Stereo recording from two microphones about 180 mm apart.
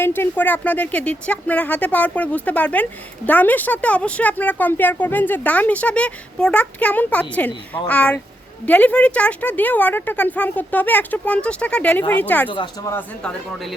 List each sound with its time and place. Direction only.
0.0 s speech: 10° left (ahead or behind)
12.5 s speech: 25° left (ahead or behind)